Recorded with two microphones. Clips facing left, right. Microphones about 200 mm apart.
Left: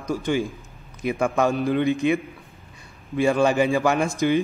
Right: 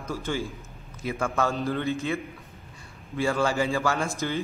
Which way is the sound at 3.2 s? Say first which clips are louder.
Left 6 dB; 15° left (ahead or behind).